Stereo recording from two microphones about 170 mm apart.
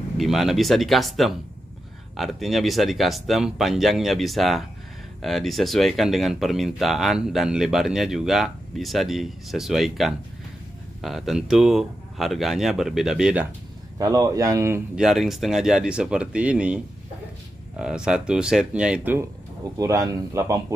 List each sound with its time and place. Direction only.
0.2 s speech: centre (ahead or behind)
13.9 s speech: 20° right (ahead or behind)
15.0 s speech: centre (ahead or behind)
19.8 s speech: 20° right (ahead or behind)